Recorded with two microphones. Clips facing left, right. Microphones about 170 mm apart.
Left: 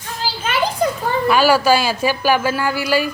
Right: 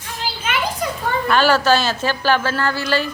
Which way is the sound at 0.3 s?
35° left (ahead or behind).